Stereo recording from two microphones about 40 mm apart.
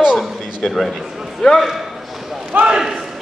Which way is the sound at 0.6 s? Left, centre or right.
Centre.